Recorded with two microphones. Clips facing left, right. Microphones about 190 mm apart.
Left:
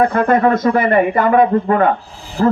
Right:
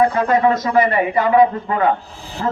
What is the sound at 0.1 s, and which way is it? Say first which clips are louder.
A man's voice: left 3 dB; 55° left (ahead or behind).